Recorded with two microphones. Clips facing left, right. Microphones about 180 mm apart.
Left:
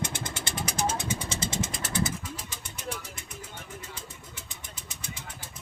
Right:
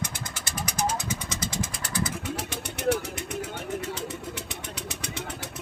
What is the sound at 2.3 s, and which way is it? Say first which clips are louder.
Vehicle: right 9 dB; 70° right (ahead or behind).